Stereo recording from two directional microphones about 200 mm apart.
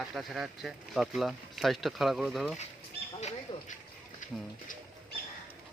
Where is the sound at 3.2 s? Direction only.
35° left (ahead or behind).